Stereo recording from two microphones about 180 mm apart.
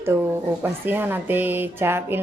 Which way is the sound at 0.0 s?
15° right (ahead or behind).